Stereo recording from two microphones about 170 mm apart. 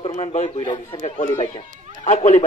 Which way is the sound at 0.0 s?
35° left (ahead or behind).